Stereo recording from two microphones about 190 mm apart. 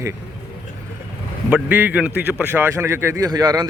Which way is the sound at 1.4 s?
10° right (ahead or behind).